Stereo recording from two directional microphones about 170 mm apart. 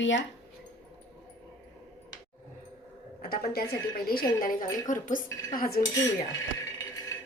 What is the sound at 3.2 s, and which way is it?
A woman's voice, 65° left (ahead or behind).